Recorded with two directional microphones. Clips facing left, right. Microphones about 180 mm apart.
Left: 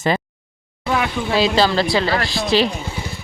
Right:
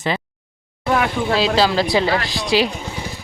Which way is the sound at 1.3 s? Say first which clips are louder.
Left 2 dB; centre (ahead or behind).